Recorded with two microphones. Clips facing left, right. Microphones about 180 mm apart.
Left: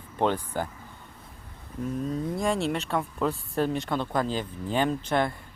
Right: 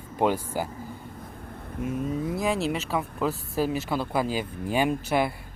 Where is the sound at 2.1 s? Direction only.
5° right (ahead or behind).